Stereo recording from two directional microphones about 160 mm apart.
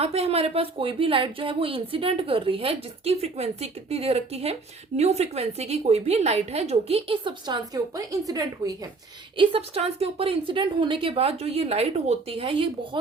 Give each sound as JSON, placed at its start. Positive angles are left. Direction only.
{"t": 0.0, "sound": "a woman's voice", "side_deg": -40}
{"t": 9.4, "sound": "speech", "side_deg": -35}